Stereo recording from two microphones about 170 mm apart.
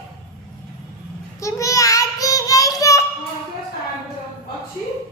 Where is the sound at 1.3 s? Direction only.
20° left (ahead or behind).